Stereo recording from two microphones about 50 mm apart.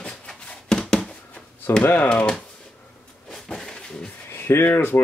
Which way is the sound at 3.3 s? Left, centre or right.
Centre.